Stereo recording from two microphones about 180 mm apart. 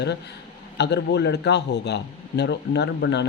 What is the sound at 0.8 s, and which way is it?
Speech, 70° left (ahead or behind).